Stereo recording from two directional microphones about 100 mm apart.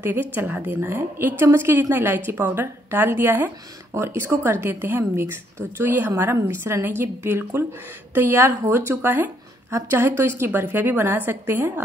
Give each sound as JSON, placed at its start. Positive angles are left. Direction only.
{"t": 0.0, "sound": "a woman's voice", "side_deg": -20}